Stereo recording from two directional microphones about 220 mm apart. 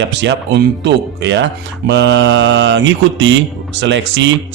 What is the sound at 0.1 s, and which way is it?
Speech, 55° right (ahead or behind).